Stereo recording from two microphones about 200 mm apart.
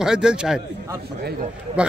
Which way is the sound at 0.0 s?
5° right (ahead or behind).